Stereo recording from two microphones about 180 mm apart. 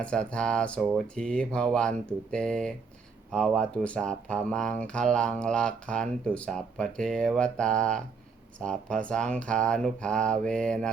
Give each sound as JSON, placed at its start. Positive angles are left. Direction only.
{"t": 0.0, "sound": "speech", "side_deg": 5}